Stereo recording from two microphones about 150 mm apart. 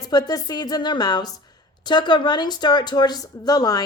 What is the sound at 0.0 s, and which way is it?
Speech, 25° left (ahead or behind).